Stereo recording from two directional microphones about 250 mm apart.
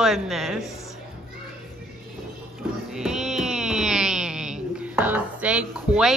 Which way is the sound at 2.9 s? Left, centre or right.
Centre.